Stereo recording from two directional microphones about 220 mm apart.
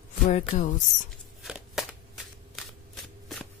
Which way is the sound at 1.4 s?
Centre (ahead or behind).